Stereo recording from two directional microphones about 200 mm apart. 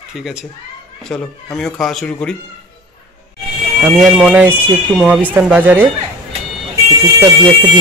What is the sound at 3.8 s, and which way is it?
Speech, centre (ahead or behind).